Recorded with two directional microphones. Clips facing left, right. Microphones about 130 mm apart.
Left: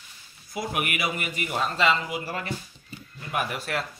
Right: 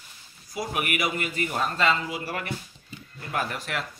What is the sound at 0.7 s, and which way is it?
Speech, 40° right (ahead or behind).